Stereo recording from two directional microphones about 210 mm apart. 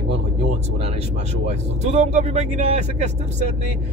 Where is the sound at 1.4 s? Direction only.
30° right (ahead or behind).